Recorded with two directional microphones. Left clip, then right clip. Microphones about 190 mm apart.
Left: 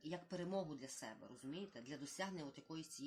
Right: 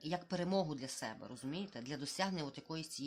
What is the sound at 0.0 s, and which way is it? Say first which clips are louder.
Speech: right 8 dB; 40° right (ahead or behind).